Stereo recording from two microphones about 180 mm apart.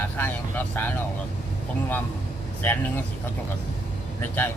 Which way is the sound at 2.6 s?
10° left (ahead or behind).